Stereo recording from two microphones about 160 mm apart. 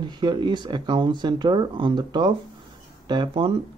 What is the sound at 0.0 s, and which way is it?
Speech, 30° right (ahead or behind).